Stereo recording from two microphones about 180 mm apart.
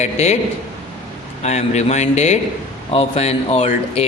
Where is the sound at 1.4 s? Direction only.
40° left (ahead or behind).